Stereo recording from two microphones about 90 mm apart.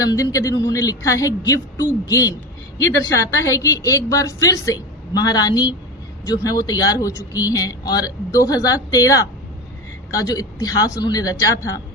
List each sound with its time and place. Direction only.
0.0 s a woman's voice: 40° left (ahead or behind)